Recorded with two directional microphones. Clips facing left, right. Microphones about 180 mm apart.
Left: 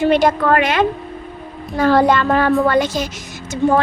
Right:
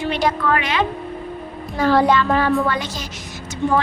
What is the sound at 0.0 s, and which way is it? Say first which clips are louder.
A woman's voice: left 6 dB; 45° left (ahead or behind).